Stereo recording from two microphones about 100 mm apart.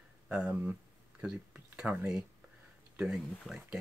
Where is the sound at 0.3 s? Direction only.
10° right (ahead or behind).